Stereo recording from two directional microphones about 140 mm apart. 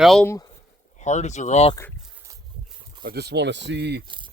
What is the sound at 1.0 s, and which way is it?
Speech, 55° left (ahead or behind).